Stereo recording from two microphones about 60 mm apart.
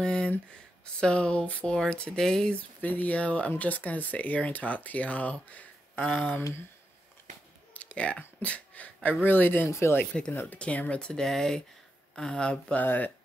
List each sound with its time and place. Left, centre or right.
0.0 s a sound: centre
0.9 s speech: centre
2.8 s speech: left
7.7 s a sound: left
9.2 s speech: left
9.7 s speech: left
10.3 s speech: left
10.6 s speech: left
12.8 s speech: left